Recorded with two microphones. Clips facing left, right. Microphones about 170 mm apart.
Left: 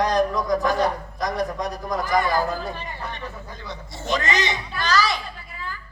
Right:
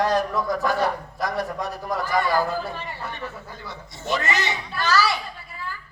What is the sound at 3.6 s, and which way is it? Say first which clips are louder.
A man's voice: left 1 dB; 15° left (ahead or behind).